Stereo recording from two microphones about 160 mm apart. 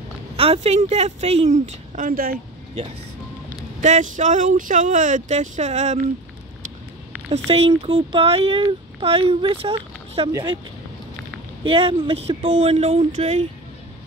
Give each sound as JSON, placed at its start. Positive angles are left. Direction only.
{"t": 0.4, "sound": "speech", "side_deg": -40}
{"t": 3.8, "sound": "speech", "side_deg": -50}
{"t": 7.2, "sound": "speech", "side_deg": -40}
{"t": 11.6, "sound": "speech", "side_deg": -35}